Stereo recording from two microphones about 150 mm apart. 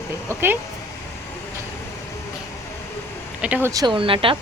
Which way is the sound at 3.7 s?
30° right (ahead or behind).